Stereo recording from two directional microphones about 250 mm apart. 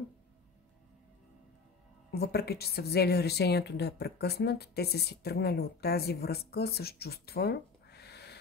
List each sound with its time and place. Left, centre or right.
2.0 s a woman's voice: left